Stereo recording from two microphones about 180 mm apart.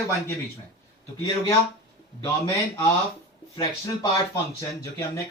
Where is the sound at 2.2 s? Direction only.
15° left (ahead or behind).